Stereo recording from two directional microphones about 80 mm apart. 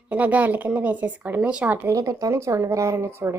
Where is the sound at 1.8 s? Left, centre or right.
Right.